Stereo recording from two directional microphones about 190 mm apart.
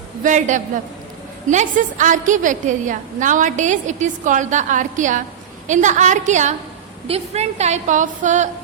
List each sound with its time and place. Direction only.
0.2 s a woman's voice: 40° right (ahead or behind)